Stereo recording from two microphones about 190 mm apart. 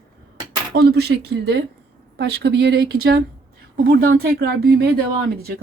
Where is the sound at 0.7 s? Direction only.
60° right (ahead or behind).